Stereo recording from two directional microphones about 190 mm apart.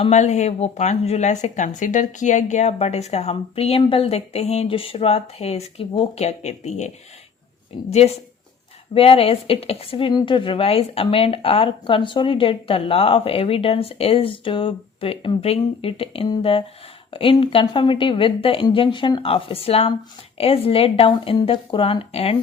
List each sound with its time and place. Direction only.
0.0 s a woman's voice: 35° left (ahead or behind)